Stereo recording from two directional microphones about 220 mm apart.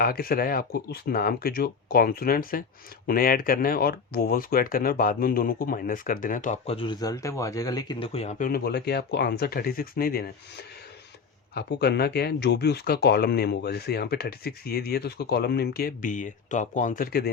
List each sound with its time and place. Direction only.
0.0 s speech: 45° left (ahead or behind)
11.5 s speech: 45° left (ahead or behind)